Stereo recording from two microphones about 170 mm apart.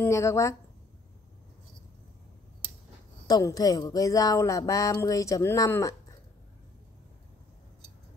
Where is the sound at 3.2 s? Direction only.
20° left (ahead or behind).